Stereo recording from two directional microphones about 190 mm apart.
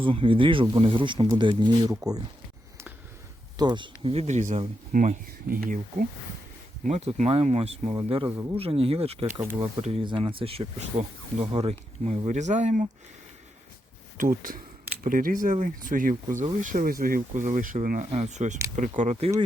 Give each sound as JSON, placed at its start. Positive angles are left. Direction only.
{"t": 0.0, "sound": "speech", "side_deg": -25}
{"t": 3.6, "sound": "speech", "side_deg": -25}
{"t": 6.8, "sound": "speech", "side_deg": -35}
{"t": 9.2, "sound": "speech", "side_deg": -15}
{"t": 9.7, "sound": "speech", "side_deg": -30}
{"t": 14.2, "sound": "speech", "side_deg": -45}